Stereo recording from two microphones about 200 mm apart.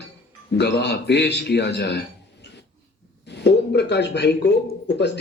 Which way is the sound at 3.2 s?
60° left (ahead or behind).